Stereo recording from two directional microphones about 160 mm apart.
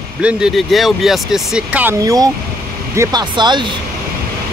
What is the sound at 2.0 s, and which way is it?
Speech, 25° right (ahead or behind).